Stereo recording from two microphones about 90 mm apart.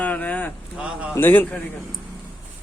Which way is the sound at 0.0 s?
15° left (ahead or behind).